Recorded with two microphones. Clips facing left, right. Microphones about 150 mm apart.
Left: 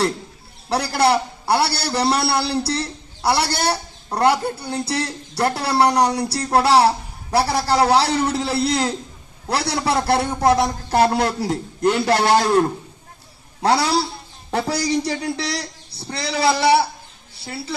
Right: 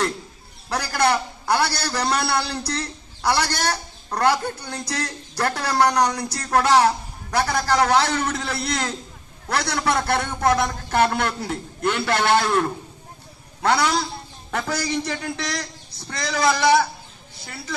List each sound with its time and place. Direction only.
0.7 s speech: 30° left (ahead or behind)